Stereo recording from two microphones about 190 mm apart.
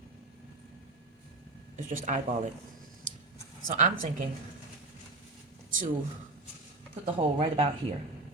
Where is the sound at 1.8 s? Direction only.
45° right (ahead or behind).